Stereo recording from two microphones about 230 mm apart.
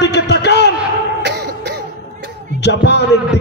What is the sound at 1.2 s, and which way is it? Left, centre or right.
Cough, right.